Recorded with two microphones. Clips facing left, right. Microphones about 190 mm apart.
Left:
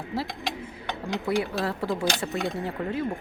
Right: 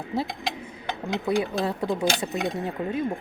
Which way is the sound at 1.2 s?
20° right (ahead or behind).